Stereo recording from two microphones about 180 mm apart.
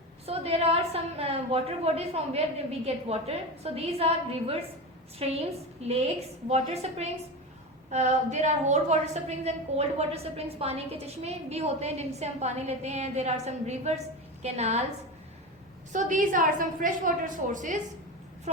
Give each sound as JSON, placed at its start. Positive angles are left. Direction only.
{"t": 0.3, "sound": "a woman's voice", "side_deg": -35}
{"t": 15.9, "sound": "a woman's voice", "side_deg": -45}